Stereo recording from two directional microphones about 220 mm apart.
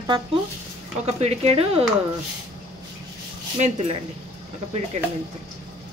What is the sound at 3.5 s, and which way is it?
Speech, 30° right (ahead or behind).